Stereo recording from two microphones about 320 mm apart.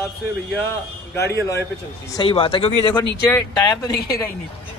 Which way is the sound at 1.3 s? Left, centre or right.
Centre.